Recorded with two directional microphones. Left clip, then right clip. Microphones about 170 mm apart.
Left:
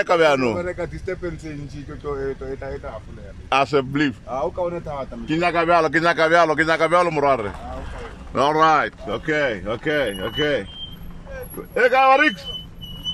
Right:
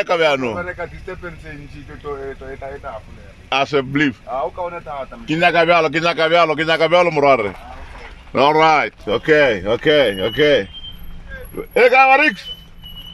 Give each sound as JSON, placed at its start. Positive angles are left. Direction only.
{"t": 0.0, "sound": "a man's voice", "side_deg": 0}
{"t": 0.6, "sound": "speech", "side_deg": 20}
{"t": 3.4, "sound": "a man's voice", "side_deg": 0}
{"t": 4.3, "sound": "speech", "side_deg": 15}
{"t": 5.2, "sound": "a man's voice", "side_deg": -5}
{"t": 11.7, "sound": "speech", "side_deg": -5}